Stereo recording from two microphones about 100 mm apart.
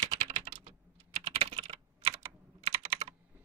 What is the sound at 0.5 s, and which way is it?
Typing, 90° right.